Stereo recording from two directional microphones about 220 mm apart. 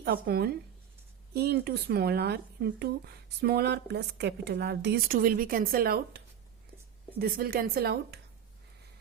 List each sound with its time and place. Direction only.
0.0 s a woman's voice: 45° right (ahead or behind)